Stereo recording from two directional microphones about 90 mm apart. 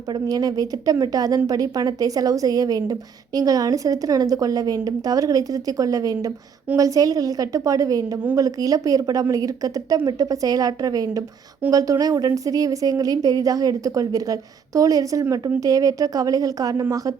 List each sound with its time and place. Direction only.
0.1 s speech: 45° right (ahead or behind)